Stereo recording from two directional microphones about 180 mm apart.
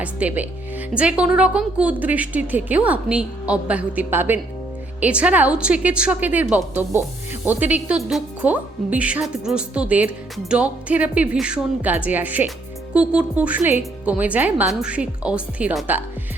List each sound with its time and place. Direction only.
0.0 s a woman's voice: 10° right (ahead or behind)